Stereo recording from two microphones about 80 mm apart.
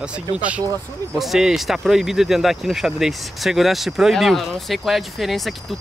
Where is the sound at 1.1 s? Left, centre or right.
Centre.